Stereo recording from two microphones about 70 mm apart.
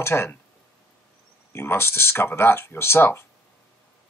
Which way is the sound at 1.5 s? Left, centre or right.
Left.